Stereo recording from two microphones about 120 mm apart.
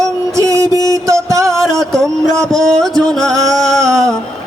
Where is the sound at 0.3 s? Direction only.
25° right (ahead or behind).